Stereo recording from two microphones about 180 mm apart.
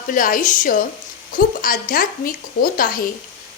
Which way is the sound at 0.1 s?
50° left (ahead or behind).